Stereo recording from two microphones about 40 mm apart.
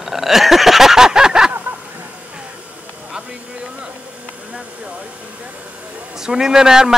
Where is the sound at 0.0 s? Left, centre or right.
Centre.